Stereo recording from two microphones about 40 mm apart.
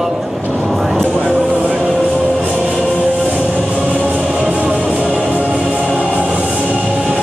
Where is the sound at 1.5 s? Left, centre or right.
Right.